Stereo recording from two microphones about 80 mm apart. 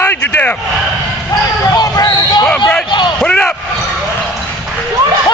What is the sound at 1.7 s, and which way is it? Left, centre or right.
Speech, left.